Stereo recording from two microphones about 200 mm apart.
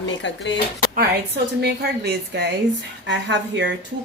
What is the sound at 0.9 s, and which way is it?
Speech, 50° right (ahead or behind).